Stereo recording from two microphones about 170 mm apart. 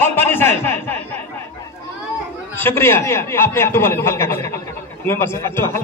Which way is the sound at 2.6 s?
15° left (ahead or behind).